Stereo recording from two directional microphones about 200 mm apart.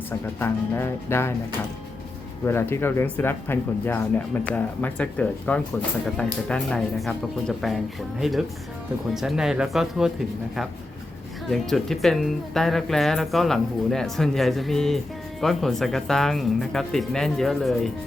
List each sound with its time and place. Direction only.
0.3 s speech: 10° left (ahead or behind)
2.4 s speech: 10° left (ahead or behind)
11.4 s speech: centre (ahead or behind)